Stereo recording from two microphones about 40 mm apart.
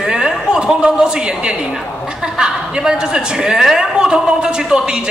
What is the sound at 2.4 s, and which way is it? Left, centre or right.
A woman's voice, right.